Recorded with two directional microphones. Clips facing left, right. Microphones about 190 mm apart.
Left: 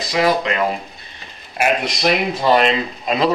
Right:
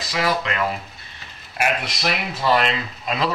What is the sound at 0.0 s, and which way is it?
Speech, 20° left (ahead or behind).